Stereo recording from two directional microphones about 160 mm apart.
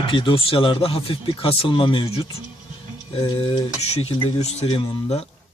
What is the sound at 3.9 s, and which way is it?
Speech, 40° left (ahead or behind).